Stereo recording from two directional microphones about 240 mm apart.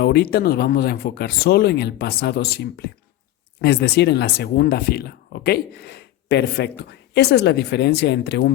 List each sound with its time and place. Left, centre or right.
0.0 s speech: left